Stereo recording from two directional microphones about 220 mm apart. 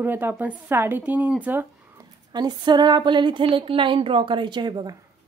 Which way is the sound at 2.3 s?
20° right (ahead or behind).